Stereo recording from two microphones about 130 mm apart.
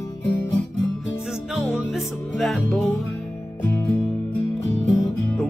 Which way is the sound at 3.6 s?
20° left (ahead or behind).